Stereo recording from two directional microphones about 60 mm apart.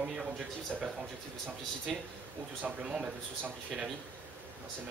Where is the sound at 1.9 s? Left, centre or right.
Centre.